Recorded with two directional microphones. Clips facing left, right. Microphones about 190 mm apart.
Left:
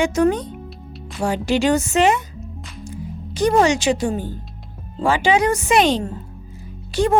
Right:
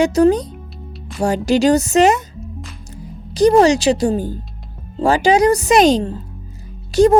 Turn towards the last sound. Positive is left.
turn(degrees=-40)  # may be behind; listen again after turning